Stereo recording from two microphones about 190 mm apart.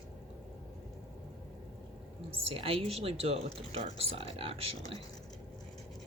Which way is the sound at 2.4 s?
30° right (ahead or behind).